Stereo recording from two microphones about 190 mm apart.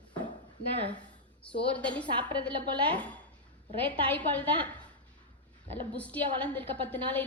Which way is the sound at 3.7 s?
30° right (ahead or behind).